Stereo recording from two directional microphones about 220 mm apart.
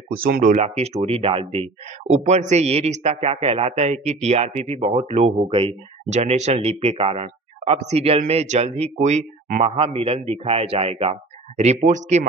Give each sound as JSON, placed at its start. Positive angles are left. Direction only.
{"t": 0.2, "sound": "speech", "side_deg": -40}